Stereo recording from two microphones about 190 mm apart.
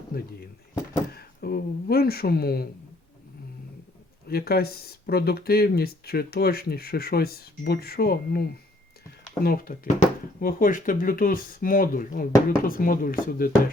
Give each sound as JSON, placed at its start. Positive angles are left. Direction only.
{"t": 0.1, "sound": "speech", "side_deg": 50}
{"t": 1.1, "sound": "a sound", "side_deg": 55}
{"t": 4.3, "sound": "speech", "side_deg": 55}